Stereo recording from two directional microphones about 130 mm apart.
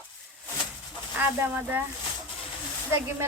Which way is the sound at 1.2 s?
15° right (ahead or behind).